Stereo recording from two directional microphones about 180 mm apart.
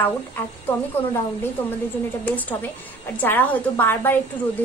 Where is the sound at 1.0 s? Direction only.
35° left (ahead or behind).